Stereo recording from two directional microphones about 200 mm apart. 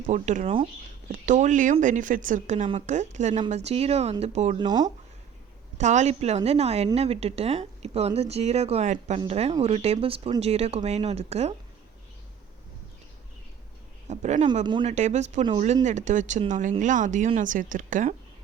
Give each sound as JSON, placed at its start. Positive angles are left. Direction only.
{"t": 0.1, "sound": "a woman's voice", "side_deg": -35}
{"t": 4.5, "sound": "speech", "side_deg": -20}
{"t": 5.7, "sound": "a woman's voice", "side_deg": -35}
{"t": 14.1, "sound": "a woman's voice", "side_deg": -35}
{"t": 14.6, "sound": "speech", "side_deg": -25}
{"t": 14.8, "sound": "a woman's voice", "side_deg": -35}